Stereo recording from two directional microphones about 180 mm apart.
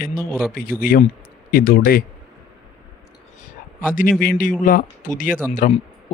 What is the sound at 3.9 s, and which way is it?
Speech, 50° left (ahead or behind).